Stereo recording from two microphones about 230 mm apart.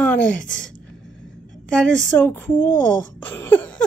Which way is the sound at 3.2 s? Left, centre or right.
Centre.